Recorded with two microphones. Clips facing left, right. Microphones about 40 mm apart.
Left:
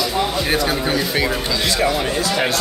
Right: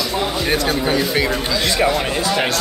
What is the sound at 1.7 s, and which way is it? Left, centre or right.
Speech, centre.